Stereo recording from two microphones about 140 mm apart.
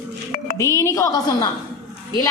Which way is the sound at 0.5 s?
20° left (ahead or behind).